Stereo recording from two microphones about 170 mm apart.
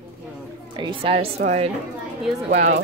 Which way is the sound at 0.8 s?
30° right (ahead or behind).